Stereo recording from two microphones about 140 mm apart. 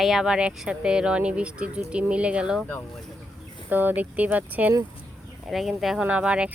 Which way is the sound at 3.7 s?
15° right (ahead or behind).